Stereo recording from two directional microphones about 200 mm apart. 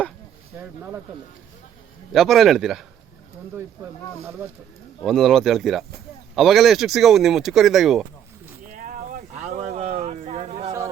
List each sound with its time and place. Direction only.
0.6 s speech: 10° right (ahead or behind)
2.1 s speech: centre (ahead or behind)
5.0 s speech: centre (ahead or behind)
8.7 s a sound: 40° right (ahead or behind)